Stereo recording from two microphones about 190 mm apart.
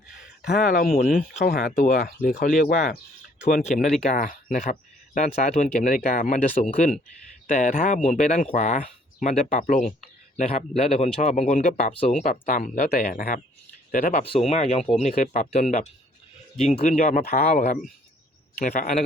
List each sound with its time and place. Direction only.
0.2 s speech: 50° left (ahead or behind)
11.9 s speech: 30° left (ahead or behind)
12.2 s speech: 45° left (ahead or behind)